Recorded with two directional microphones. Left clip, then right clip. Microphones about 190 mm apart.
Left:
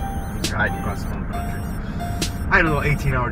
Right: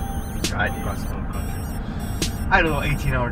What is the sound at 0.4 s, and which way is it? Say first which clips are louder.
Speech: left 2 dB; centre (ahead or behind).